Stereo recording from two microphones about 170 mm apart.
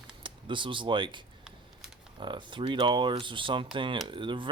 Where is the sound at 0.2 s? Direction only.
30° right (ahead or behind).